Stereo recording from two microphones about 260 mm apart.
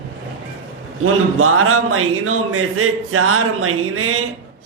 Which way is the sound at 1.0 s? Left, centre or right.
Right.